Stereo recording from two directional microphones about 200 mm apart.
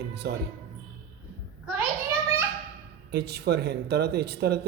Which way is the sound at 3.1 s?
55° right (ahead or behind).